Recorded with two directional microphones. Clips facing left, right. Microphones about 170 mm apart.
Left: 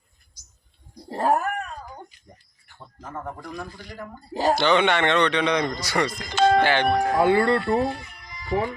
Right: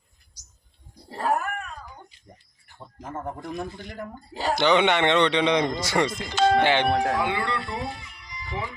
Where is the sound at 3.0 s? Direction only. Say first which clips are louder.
Right 1 dB; 20° right (ahead or behind).